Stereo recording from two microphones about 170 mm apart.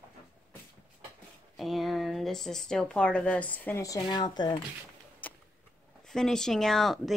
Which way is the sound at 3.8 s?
25° left (ahead or behind).